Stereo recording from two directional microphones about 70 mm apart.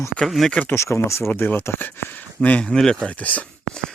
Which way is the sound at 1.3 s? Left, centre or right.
Left.